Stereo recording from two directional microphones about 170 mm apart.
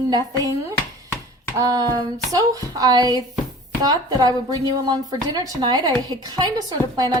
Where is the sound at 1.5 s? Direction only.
20° right (ahead or behind).